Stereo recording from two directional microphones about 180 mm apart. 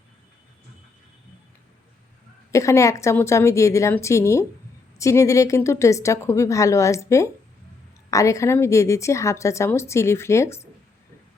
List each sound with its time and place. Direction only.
2.5 s a woman's voice: 15° left (ahead or behind)